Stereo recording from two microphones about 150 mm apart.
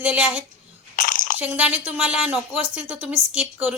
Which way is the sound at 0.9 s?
65° left (ahead or behind).